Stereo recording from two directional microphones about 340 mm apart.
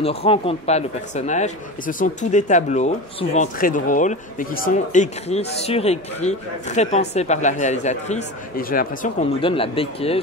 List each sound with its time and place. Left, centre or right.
0.0 s speech: centre